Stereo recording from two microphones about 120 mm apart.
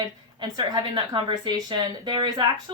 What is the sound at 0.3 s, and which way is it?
Speech, 35° right (ahead or behind).